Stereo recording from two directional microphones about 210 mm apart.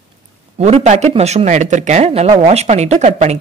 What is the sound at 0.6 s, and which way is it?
Speech, 30° right (ahead or behind).